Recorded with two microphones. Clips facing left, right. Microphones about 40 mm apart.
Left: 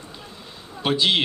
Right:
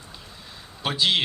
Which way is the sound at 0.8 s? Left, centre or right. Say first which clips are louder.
Left 3 dB; centre.